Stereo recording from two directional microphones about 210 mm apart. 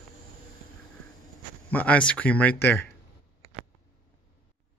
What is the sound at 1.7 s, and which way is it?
Speech, 5° left (ahead or behind).